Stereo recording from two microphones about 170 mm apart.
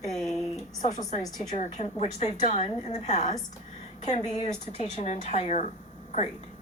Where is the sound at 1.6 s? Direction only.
40° left (ahead or behind).